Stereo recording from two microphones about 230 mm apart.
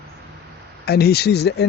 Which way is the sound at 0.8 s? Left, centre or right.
Left.